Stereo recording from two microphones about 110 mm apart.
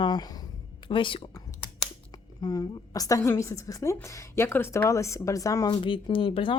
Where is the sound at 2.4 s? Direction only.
35° left (ahead or behind).